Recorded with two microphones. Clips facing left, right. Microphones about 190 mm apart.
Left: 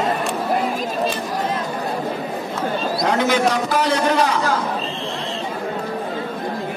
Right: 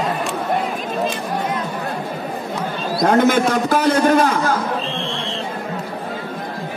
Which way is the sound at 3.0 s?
50° right (ahead or behind).